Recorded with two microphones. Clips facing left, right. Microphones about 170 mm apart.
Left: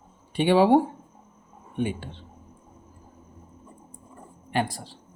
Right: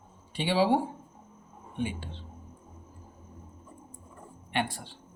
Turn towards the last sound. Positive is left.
turn(degrees=35)  # may be behind; listen again after turning